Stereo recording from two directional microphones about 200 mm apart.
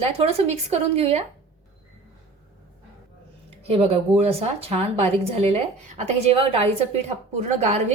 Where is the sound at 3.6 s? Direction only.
30° right (ahead or behind).